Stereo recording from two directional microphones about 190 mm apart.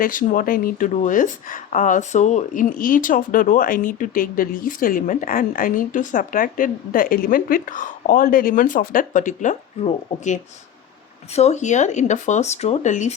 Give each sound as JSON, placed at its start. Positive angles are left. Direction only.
{"t": 0.0, "sound": "speech", "side_deg": 45}